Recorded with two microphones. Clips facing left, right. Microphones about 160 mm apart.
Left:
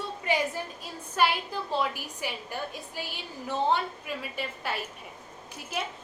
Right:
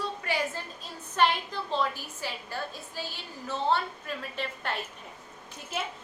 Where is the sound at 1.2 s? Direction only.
10° left (ahead or behind).